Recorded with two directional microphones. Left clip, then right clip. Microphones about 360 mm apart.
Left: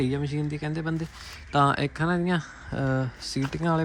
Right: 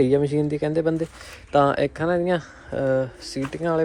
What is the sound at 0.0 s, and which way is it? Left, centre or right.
Speech, centre.